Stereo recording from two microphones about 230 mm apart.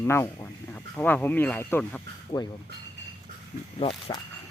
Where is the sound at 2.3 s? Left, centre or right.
Centre.